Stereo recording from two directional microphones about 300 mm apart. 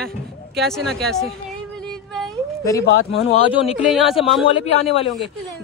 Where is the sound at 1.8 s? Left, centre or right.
Centre.